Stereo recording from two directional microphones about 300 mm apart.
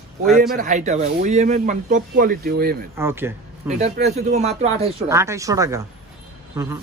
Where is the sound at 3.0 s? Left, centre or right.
Centre.